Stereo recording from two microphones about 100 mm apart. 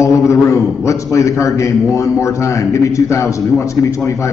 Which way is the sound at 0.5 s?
30° left (ahead or behind).